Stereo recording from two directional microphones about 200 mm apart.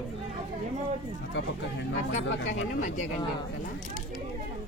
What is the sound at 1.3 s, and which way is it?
Speech, 60° left (ahead or behind).